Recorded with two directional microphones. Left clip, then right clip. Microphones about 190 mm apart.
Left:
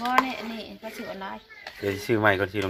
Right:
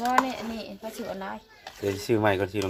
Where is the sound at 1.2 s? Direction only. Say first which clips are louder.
Even; 40° right (ahead or behind).